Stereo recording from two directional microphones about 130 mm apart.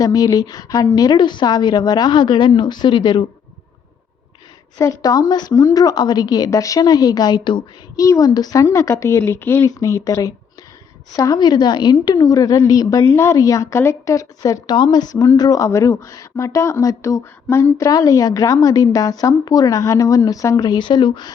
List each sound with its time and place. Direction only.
0.0 s a woman's voice: 30° left (ahead or behind)
4.8 s a woman's voice: 25° left (ahead or behind)